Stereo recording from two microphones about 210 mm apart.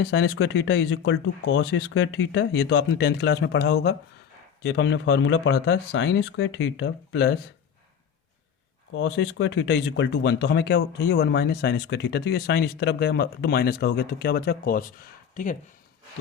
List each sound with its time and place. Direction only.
0.0 s speech: 55° left (ahead or behind)
8.9 s speech: 60° left (ahead or behind); by 15.5 s 40° left (ahead or behind)